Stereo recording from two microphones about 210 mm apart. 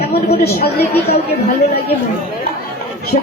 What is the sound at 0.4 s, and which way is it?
Speech, 50° left (ahead or behind).